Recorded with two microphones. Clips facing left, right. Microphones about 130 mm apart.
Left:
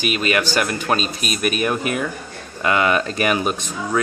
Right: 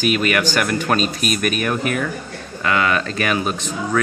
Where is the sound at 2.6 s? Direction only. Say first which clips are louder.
Left 1 dB; 20° left (ahead or behind).